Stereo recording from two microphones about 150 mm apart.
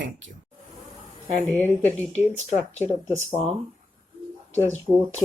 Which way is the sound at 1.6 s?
15° left (ahead or behind).